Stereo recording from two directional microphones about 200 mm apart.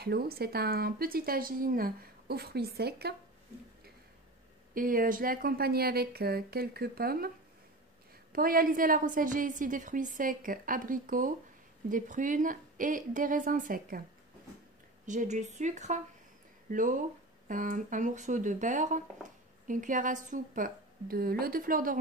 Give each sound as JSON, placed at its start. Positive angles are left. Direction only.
{"t": 0.0, "sound": "a woman's voice", "side_deg": -50}
{"t": 4.7, "sound": "a woman's voice", "side_deg": -45}
{"t": 8.3, "sound": "a woman's voice", "side_deg": -45}
{"t": 15.0, "sound": "a woman's voice", "side_deg": -40}